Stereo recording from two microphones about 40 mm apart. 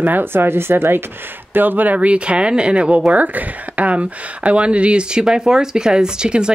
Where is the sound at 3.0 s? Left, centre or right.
Right.